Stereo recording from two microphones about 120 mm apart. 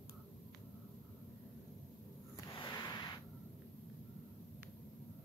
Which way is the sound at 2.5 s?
40° left (ahead or behind).